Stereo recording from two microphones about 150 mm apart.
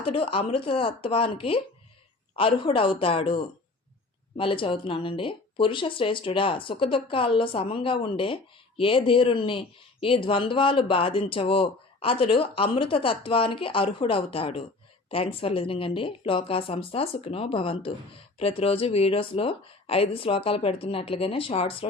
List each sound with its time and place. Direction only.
0.0 s speech: 40° left (ahead or behind)